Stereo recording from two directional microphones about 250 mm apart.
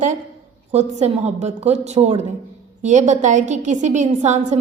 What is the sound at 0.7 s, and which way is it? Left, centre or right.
A woman's voice, right.